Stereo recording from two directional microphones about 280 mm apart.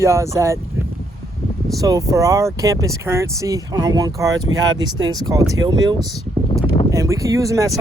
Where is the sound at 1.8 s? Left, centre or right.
Centre.